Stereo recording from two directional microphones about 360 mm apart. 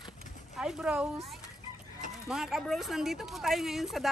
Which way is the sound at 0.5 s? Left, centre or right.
Centre.